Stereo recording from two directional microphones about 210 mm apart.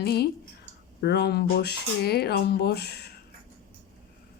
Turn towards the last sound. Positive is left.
turn(degrees=50)  # may be behind; listen again after turning